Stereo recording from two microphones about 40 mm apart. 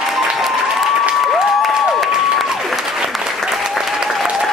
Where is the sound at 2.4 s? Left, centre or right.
Centre.